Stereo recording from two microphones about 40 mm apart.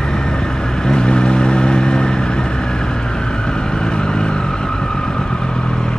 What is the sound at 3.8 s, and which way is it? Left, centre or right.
Vehicle, centre.